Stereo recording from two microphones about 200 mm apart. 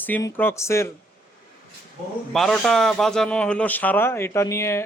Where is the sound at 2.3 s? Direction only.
Centre (ahead or behind).